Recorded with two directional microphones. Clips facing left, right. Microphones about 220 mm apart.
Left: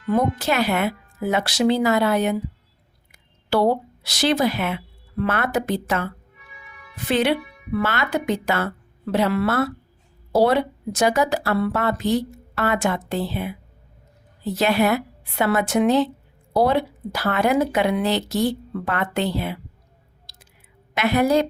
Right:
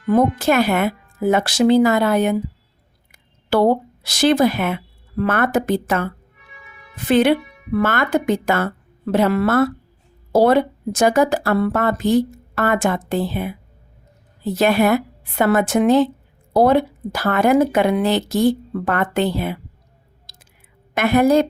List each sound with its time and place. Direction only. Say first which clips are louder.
0.1 s a woman's voice: right 5 dB; 50° right (ahead or behind)
20.3 s chewing: right 1 dB; 50° right (ahead or behind)
20.9 s a woman's voice: right 4 dB; 50° right (ahead or behind)